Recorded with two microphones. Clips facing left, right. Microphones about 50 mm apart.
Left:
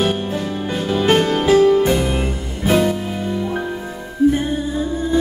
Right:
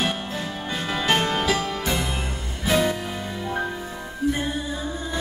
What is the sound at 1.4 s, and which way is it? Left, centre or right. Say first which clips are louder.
Music: left 12 dB; left.